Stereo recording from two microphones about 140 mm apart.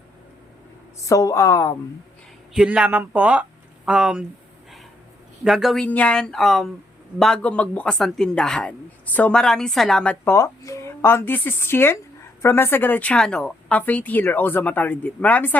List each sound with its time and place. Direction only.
1.0 s speech: 25° left (ahead or behind)
2.6 s speech: 10° right (ahead or behind)
5.4 s a woman's voice: centre (ahead or behind)
5.8 s a woman's voice: 10° left (ahead or behind)
10.3 s speech: 20° left (ahead or behind)